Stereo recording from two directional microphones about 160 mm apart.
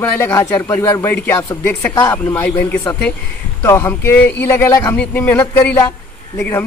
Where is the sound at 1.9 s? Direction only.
25° left (ahead or behind).